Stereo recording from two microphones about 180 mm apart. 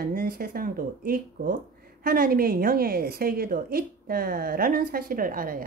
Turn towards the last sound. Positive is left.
turn(degrees=-50)  # may be behind; listen again after turning